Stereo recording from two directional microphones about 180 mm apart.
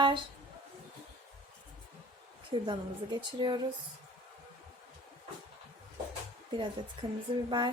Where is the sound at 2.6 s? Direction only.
25° right (ahead or behind).